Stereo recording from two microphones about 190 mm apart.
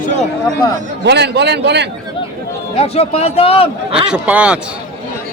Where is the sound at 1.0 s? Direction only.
65° right (ahead or behind).